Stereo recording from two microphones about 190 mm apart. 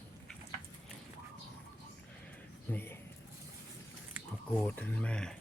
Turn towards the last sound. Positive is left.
turn(degrees=5)  # may be behind; listen again after turning